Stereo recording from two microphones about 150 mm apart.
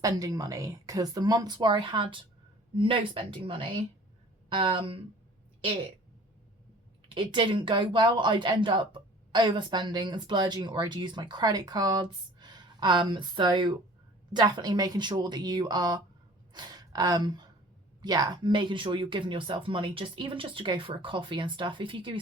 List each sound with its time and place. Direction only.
0.0 s a woman's voice: 25° right (ahead or behind)
7.1 s a woman's voice: 30° right (ahead or behind)